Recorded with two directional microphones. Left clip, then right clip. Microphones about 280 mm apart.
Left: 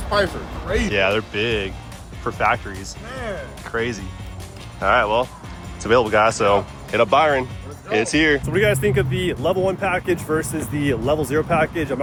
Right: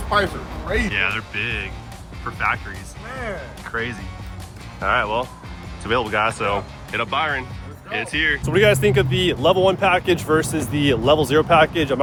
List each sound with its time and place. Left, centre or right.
0.9 s speech: centre
8.4 s speech: centre